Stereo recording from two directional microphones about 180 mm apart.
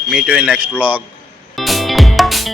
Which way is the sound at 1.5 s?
Centre (ahead or behind).